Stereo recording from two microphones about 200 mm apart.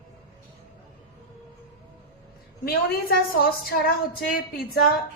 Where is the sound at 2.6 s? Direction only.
50° left (ahead or behind).